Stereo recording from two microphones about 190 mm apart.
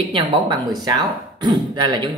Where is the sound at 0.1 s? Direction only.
25° right (ahead or behind).